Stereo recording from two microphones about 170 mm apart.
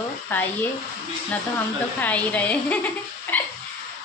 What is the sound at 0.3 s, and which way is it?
Speech, 10° left (ahead or behind).